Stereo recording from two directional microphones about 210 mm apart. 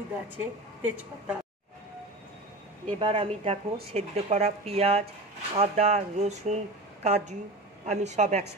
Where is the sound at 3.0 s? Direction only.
25° right (ahead or behind).